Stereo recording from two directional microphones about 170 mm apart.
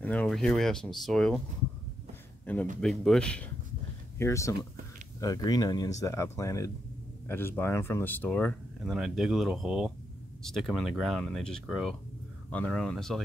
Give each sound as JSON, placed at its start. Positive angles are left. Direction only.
{"t": 0.0, "sound": "speech", "side_deg": 10}
{"t": 2.4, "sound": "a man's voice", "side_deg": 10}
{"t": 4.2, "sound": "speech", "side_deg": 15}